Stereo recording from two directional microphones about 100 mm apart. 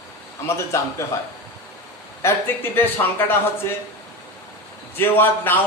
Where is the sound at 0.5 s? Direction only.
30° left (ahead or behind).